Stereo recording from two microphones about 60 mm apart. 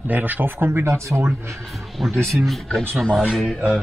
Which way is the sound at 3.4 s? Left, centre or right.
Centre.